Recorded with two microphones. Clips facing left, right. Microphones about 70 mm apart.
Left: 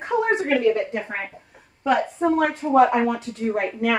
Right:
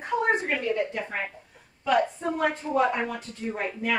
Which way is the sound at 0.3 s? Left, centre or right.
Left.